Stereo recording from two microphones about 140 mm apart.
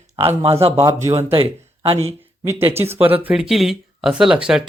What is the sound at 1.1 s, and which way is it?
Speech, 40° right (ahead or behind).